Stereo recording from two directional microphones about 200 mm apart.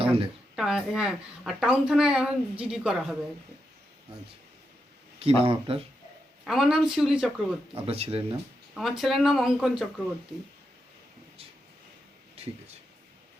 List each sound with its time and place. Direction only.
0.0 s a sound: 25° right (ahead or behind)
0.5 s a woman's voice: 5° right (ahead or behind)
5.2 s speech: 30° right (ahead or behind)
6.4 s a woman's voice: centre (ahead or behind)
7.9 s speech: 30° right (ahead or behind)
8.7 s a woman's voice: centre (ahead or behind)
12.4 s a sound: 30° right (ahead or behind)